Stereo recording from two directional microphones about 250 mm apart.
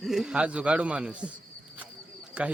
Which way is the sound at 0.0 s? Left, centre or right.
Centre.